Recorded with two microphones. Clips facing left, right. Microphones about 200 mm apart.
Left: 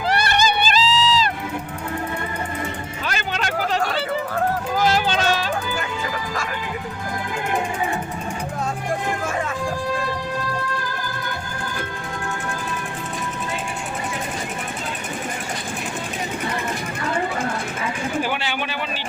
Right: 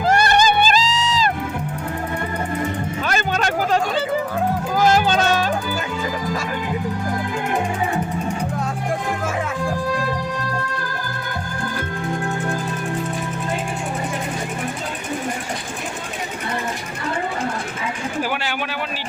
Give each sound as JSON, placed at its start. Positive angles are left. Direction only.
{"t": 0.0, "sound": "music", "side_deg": -45}
{"t": 3.1, "sound": "music", "side_deg": -45}
{"t": 4.8, "sound": "music", "side_deg": -45}